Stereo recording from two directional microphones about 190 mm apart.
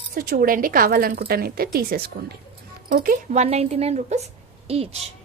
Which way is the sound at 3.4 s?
35° right (ahead or behind).